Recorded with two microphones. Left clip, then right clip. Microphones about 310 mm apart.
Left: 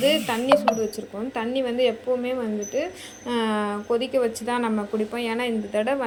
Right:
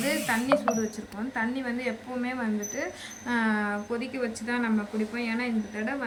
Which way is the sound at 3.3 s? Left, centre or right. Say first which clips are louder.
Left 3 dB; centre.